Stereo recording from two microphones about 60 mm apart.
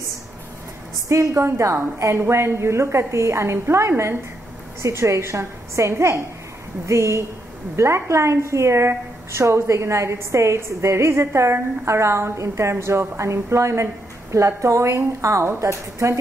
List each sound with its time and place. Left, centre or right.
1.0 s a woman's voice: right